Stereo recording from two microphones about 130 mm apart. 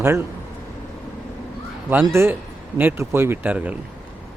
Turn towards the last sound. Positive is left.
turn(degrees=-10)  # may be behind; listen again after turning